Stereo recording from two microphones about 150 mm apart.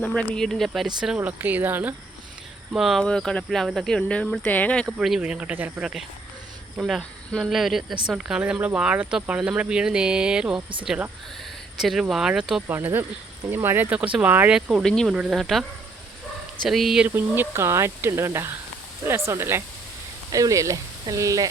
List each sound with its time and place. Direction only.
0.1 s speech: 5° left (ahead or behind)
2.7 s speech: centre (ahead or behind)
4.9 s speech: 5° right (ahead or behind)
12.6 s speech: 15° right (ahead or behind)
16.6 s speech: centre (ahead or behind)
17.2 s speech: 15° right (ahead or behind)